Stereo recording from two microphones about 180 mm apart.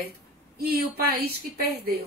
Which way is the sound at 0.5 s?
60° right (ahead or behind).